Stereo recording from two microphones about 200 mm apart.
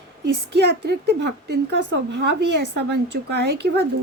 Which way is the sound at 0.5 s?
55° right (ahead or behind).